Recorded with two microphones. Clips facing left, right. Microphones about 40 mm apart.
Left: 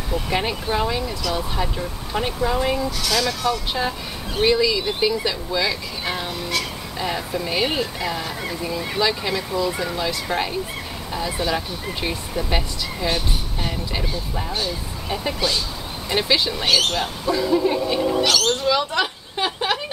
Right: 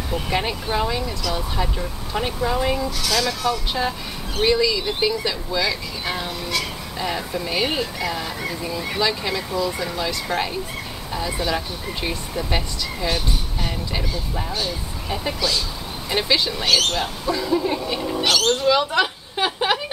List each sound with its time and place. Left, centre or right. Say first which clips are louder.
0.3 s speech: left 1 dB; centre
15.4 s speech: even; left
16.1 s speech: left 1 dB; centre
18.2 s speech: right 1 dB; centre